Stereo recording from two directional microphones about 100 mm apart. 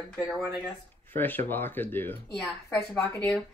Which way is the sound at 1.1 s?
20° left (ahead or behind).